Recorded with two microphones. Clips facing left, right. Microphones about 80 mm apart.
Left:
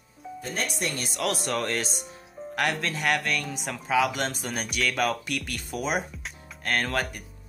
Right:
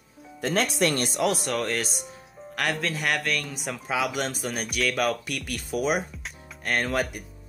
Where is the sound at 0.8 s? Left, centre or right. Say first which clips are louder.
Right 7 dB; right.